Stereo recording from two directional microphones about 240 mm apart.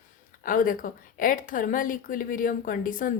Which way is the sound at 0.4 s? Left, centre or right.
Left.